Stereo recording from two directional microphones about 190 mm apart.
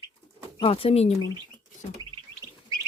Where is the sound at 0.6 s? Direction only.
30° left (ahead or behind).